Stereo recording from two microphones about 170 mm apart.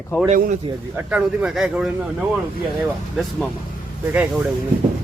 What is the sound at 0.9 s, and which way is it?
Speech, 5° right (ahead or behind).